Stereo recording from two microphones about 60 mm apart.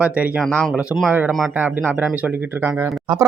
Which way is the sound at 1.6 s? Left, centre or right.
Right.